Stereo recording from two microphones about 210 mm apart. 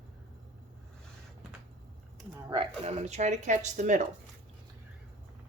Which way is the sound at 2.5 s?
25° right (ahead or behind).